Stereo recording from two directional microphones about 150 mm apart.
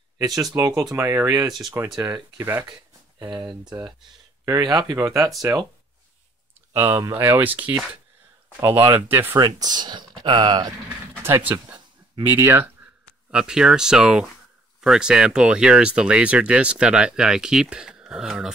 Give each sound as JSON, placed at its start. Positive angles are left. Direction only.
{"t": 0.3, "sound": "speech", "side_deg": 0}
{"t": 0.6, "sound": "speech", "side_deg": -20}
{"t": 4.5, "sound": "speech", "side_deg": -25}
{"t": 6.7, "sound": "speech", "side_deg": -20}
{"t": 9.4, "sound": "speech", "side_deg": -25}
{"t": 11.2, "sound": "speech", "side_deg": -20}
{"t": 13.3, "sound": "speech", "side_deg": -5}